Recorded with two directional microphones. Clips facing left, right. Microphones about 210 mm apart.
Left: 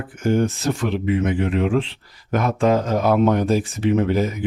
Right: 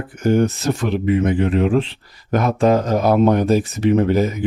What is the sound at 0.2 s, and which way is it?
Speech, 40° right (ahead or behind).